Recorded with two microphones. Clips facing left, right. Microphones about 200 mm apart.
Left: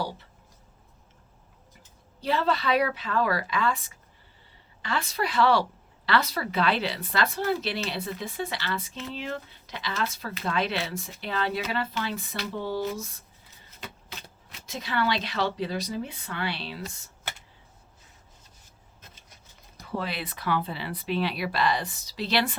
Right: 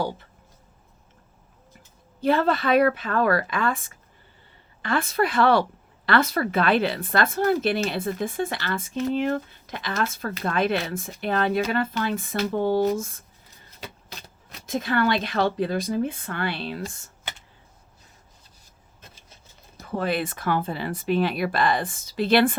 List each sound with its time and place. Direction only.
2.2 s speech: 50° right (ahead or behind)
14.7 s speech: 50° right (ahead or behind)
19.8 s speech: 50° right (ahead or behind)